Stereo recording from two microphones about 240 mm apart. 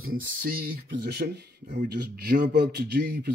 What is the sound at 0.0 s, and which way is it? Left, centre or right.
A man's voice, right.